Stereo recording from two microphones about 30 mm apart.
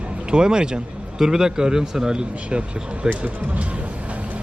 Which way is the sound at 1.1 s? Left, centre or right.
Centre.